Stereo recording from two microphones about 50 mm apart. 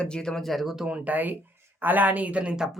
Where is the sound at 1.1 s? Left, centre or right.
Right.